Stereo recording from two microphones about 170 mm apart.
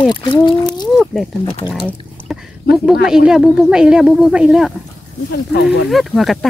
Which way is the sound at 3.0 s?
5° right (ahead or behind).